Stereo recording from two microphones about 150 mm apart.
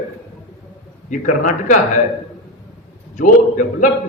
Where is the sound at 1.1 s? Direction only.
65° left (ahead or behind).